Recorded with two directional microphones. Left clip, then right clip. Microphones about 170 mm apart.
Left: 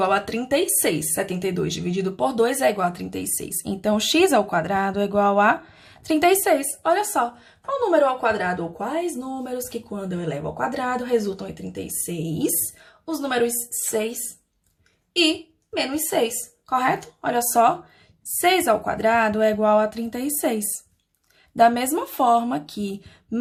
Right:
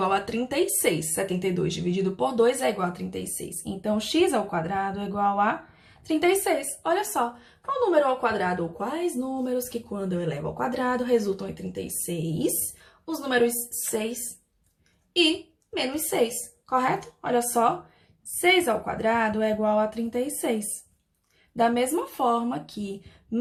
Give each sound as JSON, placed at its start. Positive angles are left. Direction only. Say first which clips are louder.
{"t": 0.0, "sound": "a woman's voice", "louder": "left 4 dB", "side_deg": 35}
{"t": 15.7, "sound": "a woman's voice", "louder": "left 4 dB", "side_deg": 25}